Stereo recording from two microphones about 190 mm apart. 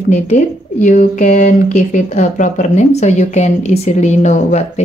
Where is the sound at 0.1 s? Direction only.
40° left (ahead or behind).